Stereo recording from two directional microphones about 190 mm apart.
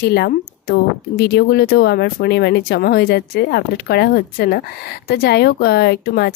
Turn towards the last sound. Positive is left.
turn(degrees=60)  # may be behind; listen again after turning